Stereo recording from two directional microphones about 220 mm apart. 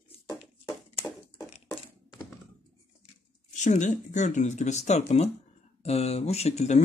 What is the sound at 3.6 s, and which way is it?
Speech, 35° left (ahead or behind).